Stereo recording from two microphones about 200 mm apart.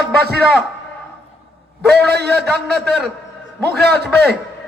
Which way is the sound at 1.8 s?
55° right (ahead or behind).